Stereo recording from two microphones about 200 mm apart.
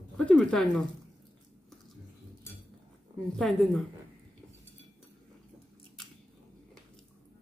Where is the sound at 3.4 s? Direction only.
Centre (ahead or behind).